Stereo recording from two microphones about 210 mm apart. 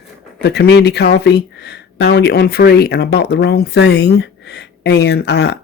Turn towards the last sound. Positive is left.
turn(degrees=55)  # may be behind; listen again after turning